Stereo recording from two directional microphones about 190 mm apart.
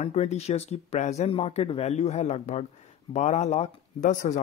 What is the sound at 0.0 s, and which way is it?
Speech, 35° left (ahead or behind).